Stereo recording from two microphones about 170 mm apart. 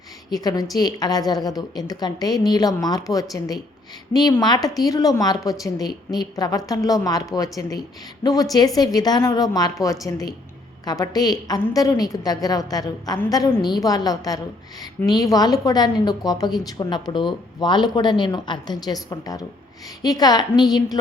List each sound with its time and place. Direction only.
0.3 s a woman's voice: 20° left (ahead or behind)